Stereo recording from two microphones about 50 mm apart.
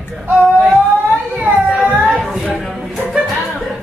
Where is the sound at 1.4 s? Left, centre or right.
Right.